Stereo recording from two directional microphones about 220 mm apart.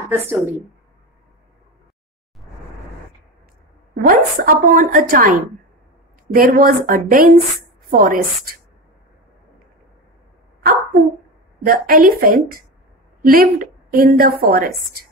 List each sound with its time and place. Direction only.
0.1 s a woman's voice: 10° right (ahead or behind)
3.9 s a woman's voice: 40° right (ahead or behind)
10.6 s a sound: 45° right (ahead or behind)
11.6 s a woman's voice: 40° right (ahead or behind)